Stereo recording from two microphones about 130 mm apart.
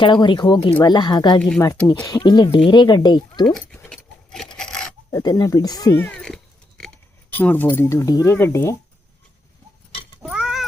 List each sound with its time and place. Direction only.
0.0 s speech: 35° left (ahead or behind)
1.4 s speech: 5° left (ahead or behind)
2.0 s speech: 30° left (ahead or behind)
3.4 s speech: 5° left (ahead or behind)
3.8 s a sound: 5° left (ahead or behind)
5.1 s speech: 30° left (ahead or behind)
6.0 s speech: 10° left (ahead or behind)
10.2 s cat: 5° right (ahead or behind)